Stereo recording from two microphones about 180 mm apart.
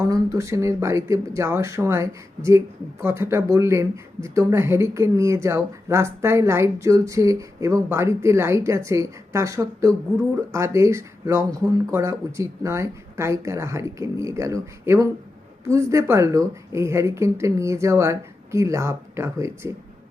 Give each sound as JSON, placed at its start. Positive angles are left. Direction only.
{"t": 0.0, "sound": "speech", "side_deg": -15}